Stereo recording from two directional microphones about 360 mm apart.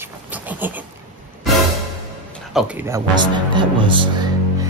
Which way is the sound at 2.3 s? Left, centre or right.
Centre.